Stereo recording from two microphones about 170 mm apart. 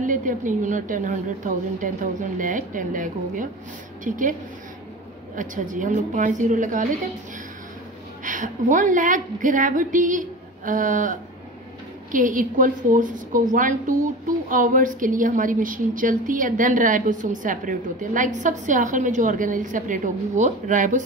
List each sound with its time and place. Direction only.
0.0 s a woman's voice: 50° right (ahead or behind)
8.2 s a woman's voice: 50° right (ahead or behind)